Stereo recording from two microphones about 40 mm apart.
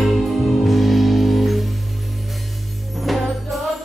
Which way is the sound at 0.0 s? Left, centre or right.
Centre.